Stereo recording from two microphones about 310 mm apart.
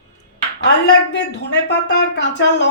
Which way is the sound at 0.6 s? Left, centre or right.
Left.